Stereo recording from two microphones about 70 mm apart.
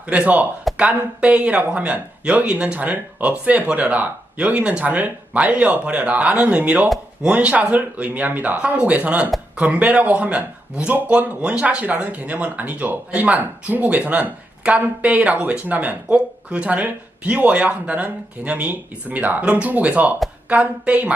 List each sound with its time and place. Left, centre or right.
0.1 s speech: centre